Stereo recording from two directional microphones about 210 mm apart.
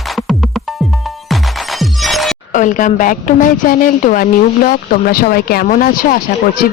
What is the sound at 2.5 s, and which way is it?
A woman's voice, 40° left (ahead or behind).